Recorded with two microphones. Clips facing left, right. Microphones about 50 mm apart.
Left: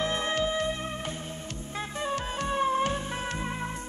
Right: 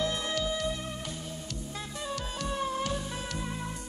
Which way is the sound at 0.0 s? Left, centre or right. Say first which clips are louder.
Left 3 dB; left.